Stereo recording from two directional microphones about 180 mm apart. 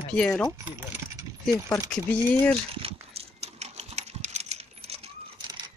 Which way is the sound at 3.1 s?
35° right (ahead or behind).